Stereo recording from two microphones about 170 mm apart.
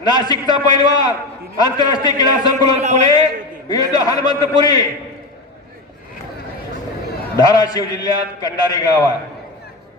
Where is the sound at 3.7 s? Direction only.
20° left (ahead or behind).